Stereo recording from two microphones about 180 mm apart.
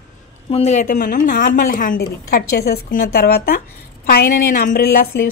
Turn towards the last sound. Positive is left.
turn(degrees=55)  # may be behind; listen again after turning